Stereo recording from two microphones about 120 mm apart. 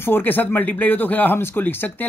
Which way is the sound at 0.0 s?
15° left (ahead or behind).